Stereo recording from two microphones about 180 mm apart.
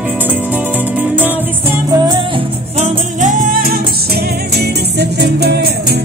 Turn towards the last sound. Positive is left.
turn(degrees=-65)  # may be behind; listen again after turning